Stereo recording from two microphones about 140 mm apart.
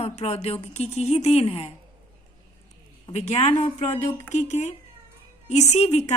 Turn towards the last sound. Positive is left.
turn(degrees=50)  # may be behind; listen again after turning